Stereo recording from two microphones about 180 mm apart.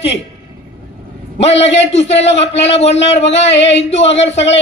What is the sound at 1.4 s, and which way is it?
Speech, 35° left (ahead or behind).